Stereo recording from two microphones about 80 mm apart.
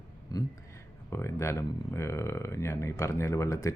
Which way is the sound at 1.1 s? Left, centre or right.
Left.